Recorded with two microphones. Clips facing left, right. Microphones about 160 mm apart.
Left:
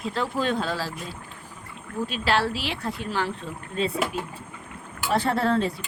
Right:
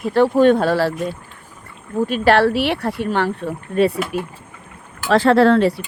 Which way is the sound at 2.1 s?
60° right (ahead or behind).